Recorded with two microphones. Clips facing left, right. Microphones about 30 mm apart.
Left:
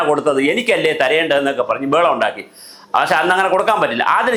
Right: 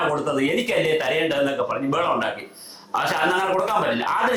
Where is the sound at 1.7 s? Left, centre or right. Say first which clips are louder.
Left 6 dB; left.